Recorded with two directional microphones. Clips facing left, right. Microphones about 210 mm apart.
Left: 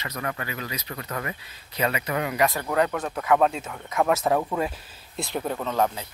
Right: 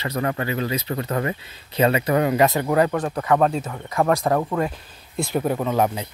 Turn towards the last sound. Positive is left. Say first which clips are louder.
# right 4 dB
turn(degrees=-15)  # may be behind; listen again after turning